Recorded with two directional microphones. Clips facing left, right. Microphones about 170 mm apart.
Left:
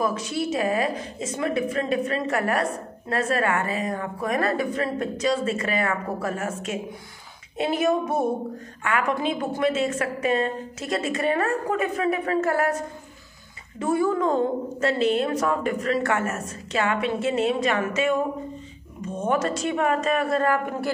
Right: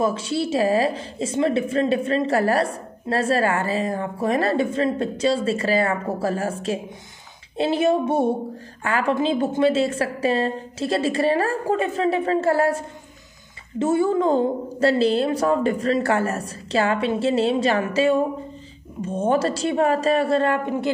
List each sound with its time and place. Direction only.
0.0 s a woman's voice: 30° right (ahead or behind)